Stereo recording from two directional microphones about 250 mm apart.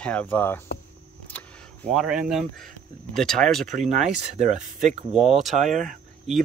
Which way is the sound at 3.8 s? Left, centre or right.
Right.